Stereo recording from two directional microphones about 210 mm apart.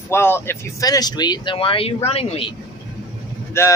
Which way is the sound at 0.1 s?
10° left (ahead or behind).